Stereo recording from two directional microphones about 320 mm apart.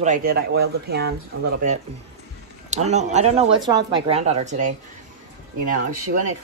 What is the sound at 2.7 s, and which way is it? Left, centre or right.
Speech, right.